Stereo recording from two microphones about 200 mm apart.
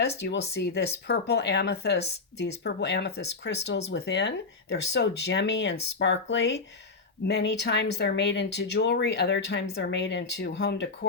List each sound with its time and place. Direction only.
0.2 s speech: 60° left (ahead or behind)